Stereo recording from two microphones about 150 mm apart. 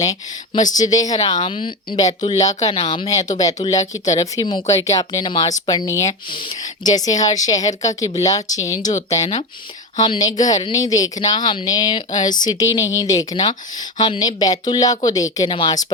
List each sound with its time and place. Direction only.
0.6 s speech: 25° left (ahead or behind)
1.4 s speech: 35° left (ahead or behind)
2.7 s speech: 45° left (ahead or behind)
3.1 s speech: 25° left (ahead or behind)